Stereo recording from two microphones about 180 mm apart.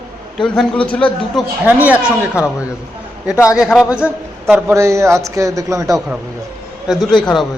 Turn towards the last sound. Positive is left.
turn(degrees=5)  # may be behind; listen again after turning